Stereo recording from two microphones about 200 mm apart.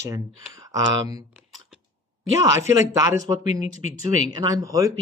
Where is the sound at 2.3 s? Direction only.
15° right (ahead or behind).